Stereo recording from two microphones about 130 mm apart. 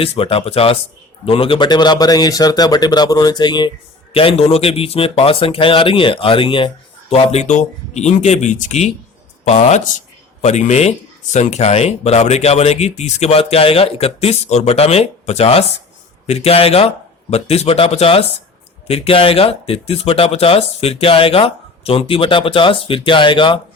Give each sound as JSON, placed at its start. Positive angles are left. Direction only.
{"t": 0.0, "sound": "a man's voice", "side_deg": 45}
{"t": 4.1, "sound": "speech", "side_deg": 45}
{"t": 9.4, "sound": "speech", "side_deg": 55}